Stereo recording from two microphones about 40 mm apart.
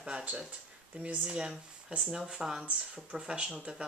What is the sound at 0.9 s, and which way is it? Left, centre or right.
Speech, right.